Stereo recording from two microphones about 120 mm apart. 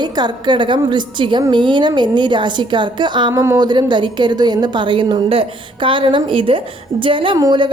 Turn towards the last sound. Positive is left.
turn(degrees=-40)  # may be behind; listen again after turning